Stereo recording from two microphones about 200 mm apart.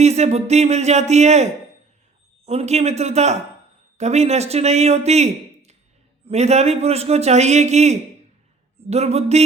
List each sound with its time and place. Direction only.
0.0 s a man's voice: 35° right (ahead or behind)
2.5 s a man's voice: 30° right (ahead or behind)